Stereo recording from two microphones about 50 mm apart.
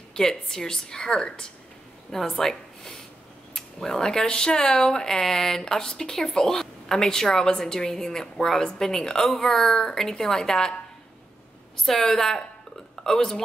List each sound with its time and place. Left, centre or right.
0.1 s speech: centre
11.8 s speech: centre